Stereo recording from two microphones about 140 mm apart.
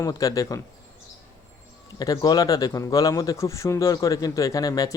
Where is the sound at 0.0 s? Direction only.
25° left (ahead or behind).